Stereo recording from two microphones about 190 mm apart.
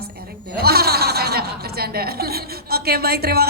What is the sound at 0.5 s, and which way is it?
Speech, 55° right (ahead or behind).